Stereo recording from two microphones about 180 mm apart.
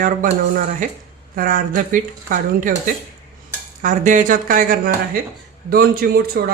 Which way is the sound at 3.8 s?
45° right (ahead or behind).